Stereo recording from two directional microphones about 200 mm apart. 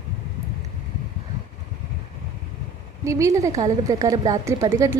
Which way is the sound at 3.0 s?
15° right (ahead or behind).